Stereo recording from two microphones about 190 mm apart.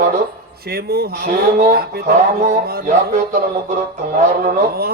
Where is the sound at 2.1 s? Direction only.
35° right (ahead or behind).